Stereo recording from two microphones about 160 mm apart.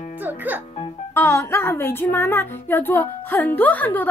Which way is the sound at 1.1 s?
15° left (ahead or behind).